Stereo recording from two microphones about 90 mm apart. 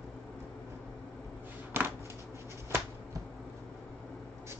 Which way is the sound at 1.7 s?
25° right (ahead or behind).